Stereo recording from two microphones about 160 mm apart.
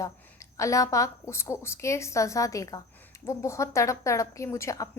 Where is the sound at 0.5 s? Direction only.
20° left (ahead or behind).